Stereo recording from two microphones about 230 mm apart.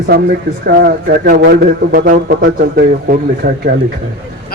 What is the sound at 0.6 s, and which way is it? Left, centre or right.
A man's voice, right.